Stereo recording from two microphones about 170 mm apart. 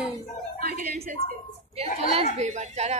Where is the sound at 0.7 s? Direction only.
60° right (ahead or behind).